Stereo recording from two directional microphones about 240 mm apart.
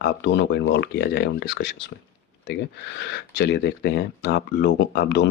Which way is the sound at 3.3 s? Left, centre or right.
Left.